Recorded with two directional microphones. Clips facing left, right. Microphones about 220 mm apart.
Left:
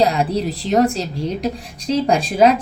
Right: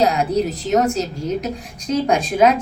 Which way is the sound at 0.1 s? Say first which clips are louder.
Right 1 dB; 35° left (ahead or behind).